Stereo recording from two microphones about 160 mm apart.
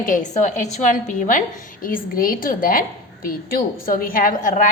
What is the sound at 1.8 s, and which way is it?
A woman's voice, 65° left (ahead or behind).